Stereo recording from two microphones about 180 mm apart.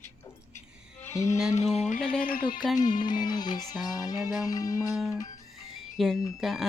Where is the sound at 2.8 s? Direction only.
25° left (ahead or behind).